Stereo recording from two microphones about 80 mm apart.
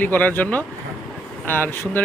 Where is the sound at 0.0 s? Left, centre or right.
Centre.